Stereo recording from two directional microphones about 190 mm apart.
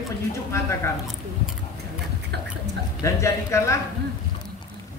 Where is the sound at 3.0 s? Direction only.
15° left (ahead or behind).